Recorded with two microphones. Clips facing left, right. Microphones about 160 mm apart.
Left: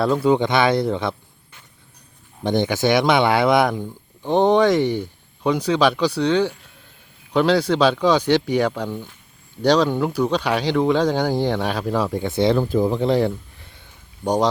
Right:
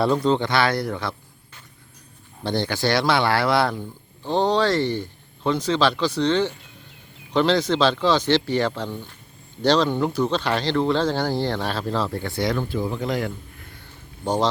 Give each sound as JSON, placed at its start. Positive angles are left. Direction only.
{"t": 0.0, "sound": "speech", "side_deg": 0}
{"t": 0.3, "sound": "speech", "side_deg": 15}
{"t": 2.4, "sound": "speech", "side_deg": 15}
{"t": 12.6, "sound": "speech", "side_deg": 45}
{"t": 13.0, "sound": "speech", "side_deg": 30}